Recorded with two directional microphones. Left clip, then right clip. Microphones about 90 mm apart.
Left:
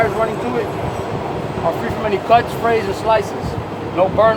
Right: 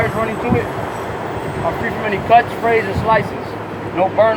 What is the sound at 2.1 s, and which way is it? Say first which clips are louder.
Speech: right 2 dB; 60° left (ahead or behind).